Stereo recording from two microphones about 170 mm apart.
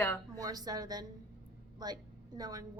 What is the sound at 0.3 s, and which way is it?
Speech, 20° right (ahead or behind).